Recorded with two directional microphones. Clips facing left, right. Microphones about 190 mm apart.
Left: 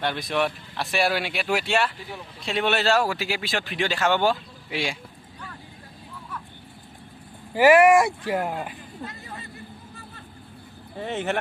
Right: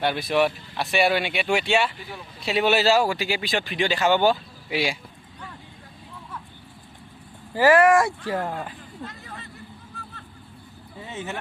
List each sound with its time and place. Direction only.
0.0 s speech: 5° right (ahead or behind)
7.5 s speech: 15° left (ahead or behind)
10.9 s speech: 70° left (ahead or behind)